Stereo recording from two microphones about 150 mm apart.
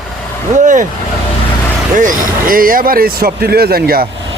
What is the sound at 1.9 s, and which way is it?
Speech, 60° right (ahead or behind).